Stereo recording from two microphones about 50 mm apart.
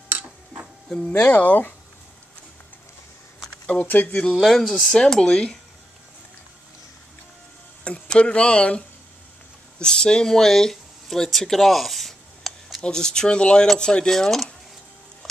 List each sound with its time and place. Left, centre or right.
0.8 s speech: centre
1.1 s speech: left
3.6 s speech: left
4.4 s speech: centre
7.8 s speech: left; by 12.5 s centre
12.8 s speech: centre